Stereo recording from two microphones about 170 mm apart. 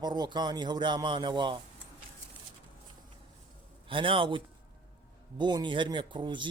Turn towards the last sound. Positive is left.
turn(degrees=-30)  # may be behind; listen again after turning